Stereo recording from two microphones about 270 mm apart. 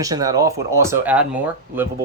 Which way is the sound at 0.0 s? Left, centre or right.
Centre.